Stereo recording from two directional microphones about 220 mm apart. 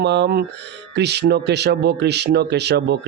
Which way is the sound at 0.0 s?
50° right (ahead or behind).